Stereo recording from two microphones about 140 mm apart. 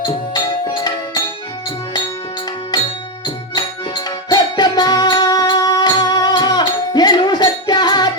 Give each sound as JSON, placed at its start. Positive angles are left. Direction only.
{"t": 0.0, "sound": "music", "side_deg": 30}
{"t": 3.5, "sound": "music", "side_deg": 30}